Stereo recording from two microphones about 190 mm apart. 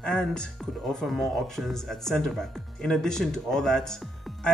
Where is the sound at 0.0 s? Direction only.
5° left (ahead or behind).